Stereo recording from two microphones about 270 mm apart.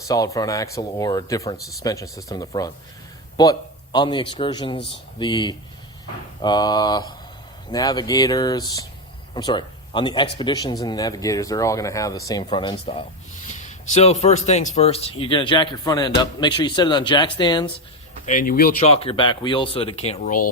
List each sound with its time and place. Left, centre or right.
0.1 s a man's voice: centre
18.3 s speech: left